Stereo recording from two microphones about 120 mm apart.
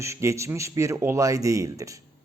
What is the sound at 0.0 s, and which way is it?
Speech, 25° right (ahead or behind).